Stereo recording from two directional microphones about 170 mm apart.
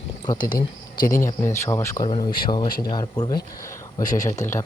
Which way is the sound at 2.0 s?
30° left (ahead or behind).